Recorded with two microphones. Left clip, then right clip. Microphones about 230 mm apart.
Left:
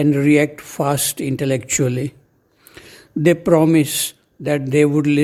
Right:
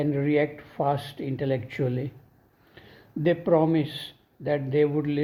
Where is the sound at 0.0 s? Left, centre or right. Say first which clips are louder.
Left 9 dB; left.